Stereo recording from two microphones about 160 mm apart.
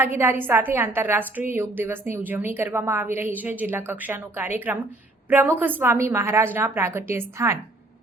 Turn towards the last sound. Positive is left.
turn(degrees=-15)  # may be behind; listen again after turning